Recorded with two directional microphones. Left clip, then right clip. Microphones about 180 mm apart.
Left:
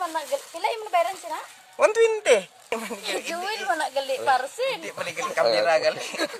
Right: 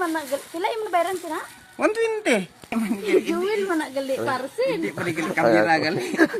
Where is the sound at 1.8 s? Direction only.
35° left (ahead or behind).